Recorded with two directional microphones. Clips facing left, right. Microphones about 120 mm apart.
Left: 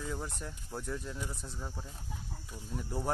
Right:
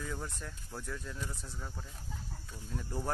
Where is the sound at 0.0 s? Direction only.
15° left (ahead or behind).